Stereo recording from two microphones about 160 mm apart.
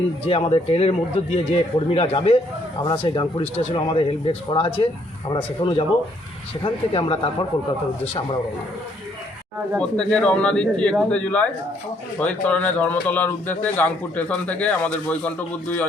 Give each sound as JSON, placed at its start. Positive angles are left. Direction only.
{"t": 0.3, "sound": "speech", "side_deg": 35}
{"t": 9.7, "sound": "a man's voice", "side_deg": 5}